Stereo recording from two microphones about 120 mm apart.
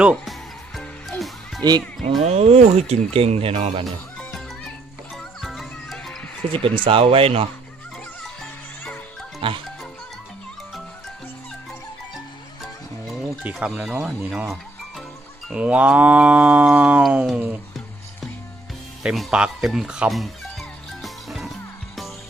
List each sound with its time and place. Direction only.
0.0 s music: 5° right (ahead or behind)
1.6 s speech: 35° right (ahead or behind)
2.2 s speech: 60° right (ahead or behind)
4.3 s music: 5° left (ahead or behind)
6.8 s speech: 50° right (ahead or behind)
9.4 s speech: 45° right (ahead or behind)
12.6 s music: centre (ahead or behind)
13.4 s livestock: 10° right (ahead or behind)
14.0 s speech: 10° right (ahead or behind)
15.4 s livestock: 10° right (ahead or behind)
19.0 s music: 5° right (ahead or behind)